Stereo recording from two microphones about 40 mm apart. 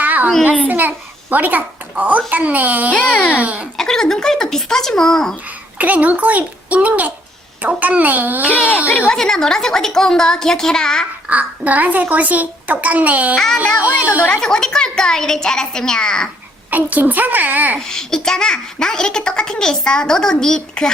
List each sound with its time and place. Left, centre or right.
0.0 s a sound: right
0.7 s a child's voice: right
3.8 s a woman's voice: centre
5.7 s a child's voice: right
8.5 s a woman's voice: left
9.1 s a woman's voice: centre
11.3 s a child's voice: right
14.3 s a woman's voice: centre
16.6 s a woman's voice: right
17.7 s a woman's voice: centre